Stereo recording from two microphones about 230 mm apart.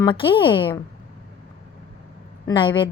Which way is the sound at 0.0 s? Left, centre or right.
Left.